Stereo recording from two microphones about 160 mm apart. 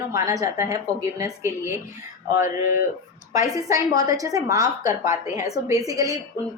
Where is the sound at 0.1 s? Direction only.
20° right (ahead or behind).